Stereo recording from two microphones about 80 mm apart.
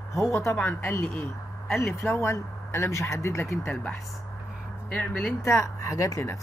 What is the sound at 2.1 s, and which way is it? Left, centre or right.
A woman's voice, left.